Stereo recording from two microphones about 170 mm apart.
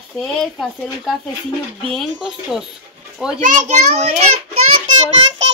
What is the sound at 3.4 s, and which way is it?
Speech, 50° right (ahead or behind).